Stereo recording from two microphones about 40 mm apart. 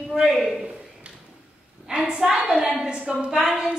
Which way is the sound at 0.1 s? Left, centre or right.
Centre.